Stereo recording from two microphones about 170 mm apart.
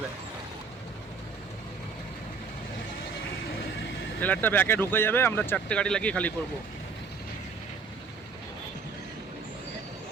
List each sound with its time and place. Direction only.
4.2 s speech: 10° left (ahead or behind)